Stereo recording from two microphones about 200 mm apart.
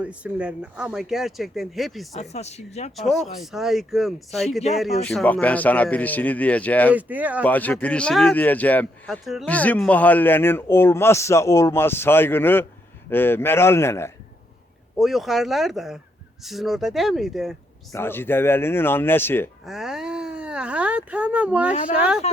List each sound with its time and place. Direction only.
0.0 s speech: 5° right (ahead or behind)
2.3 s speech: 35° left (ahead or behind)
3.0 s speech: centre (ahead or behind)
6.9 s speech: 10° right (ahead or behind)
7.4 s speech: 10° left (ahead or behind)
14.9 s speech: centre (ahead or behind)
17.9 s speech: 10° left (ahead or behind)
19.6 s speech: centre (ahead or behind)